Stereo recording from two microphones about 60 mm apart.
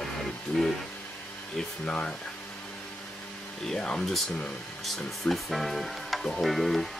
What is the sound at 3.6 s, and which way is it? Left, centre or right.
Speech, centre.